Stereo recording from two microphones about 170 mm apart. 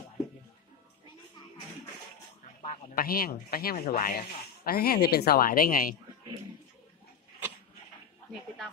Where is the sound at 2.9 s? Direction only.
60° left (ahead or behind).